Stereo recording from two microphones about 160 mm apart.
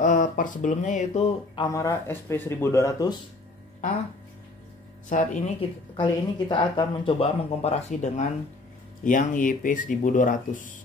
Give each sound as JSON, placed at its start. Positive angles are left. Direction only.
{"t": 0.0, "sound": "speech", "side_deg": 55}
{"t": 1.7, "sound": "speech", "side_deg": 20}
{"t": 5.1, "sound": "speech", "side_deg": 50}
{"t": 5.9, "sound": "speech", "side_deg": 30}
{"t": 9.0, "sound": "speech", "side_deg": 55}